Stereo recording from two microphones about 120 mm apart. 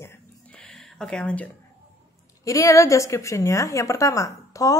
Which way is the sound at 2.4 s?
25° left (ahead or behind).